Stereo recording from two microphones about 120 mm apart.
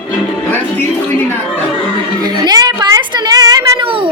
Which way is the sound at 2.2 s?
35° right (ahead or behind).